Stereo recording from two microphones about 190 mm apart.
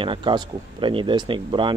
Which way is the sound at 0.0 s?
25° right (ahead or behind).